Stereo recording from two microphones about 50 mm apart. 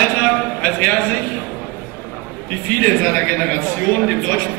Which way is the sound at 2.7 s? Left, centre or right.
Left.